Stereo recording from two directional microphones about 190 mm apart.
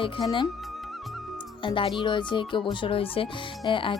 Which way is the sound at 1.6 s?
25° left (ahead or behind).